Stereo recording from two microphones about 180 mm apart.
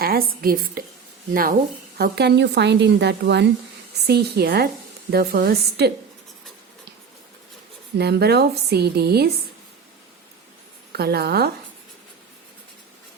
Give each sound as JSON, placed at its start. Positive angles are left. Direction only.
{"t": 0.0, "sound": "a woman's voice", "side_deg": -55}
{"t": 2.0, "sound": "a woman's voice", "side_deg": -65}
{"t": 7.9, "sound": "a woman's voice", "side_deg": -65}
{"t": 10.9, "sound": "a woman's voice", "side_deg": -60}